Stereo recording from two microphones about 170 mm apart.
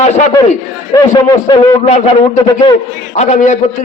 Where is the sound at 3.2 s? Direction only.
45° left (ahead or behind).